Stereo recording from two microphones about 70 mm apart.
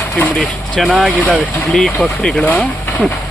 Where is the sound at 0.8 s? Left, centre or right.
Centre.